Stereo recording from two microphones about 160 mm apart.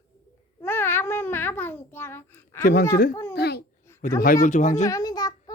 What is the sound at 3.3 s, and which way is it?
Babbling, 90° left.